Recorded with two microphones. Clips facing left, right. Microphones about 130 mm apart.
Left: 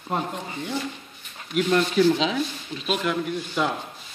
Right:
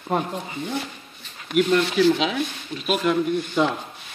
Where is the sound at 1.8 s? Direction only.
85° right.